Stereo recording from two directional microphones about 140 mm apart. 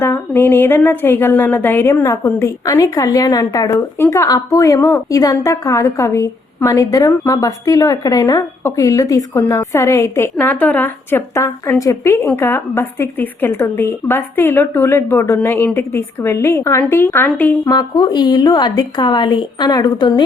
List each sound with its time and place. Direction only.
0.0 s a woman's voice: 15° left (ahead or behind)
17.7 s a woman's voice: 30° left (ahead or behind)